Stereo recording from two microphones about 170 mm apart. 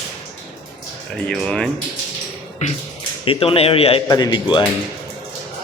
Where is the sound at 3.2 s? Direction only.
35° left (ahead or behind).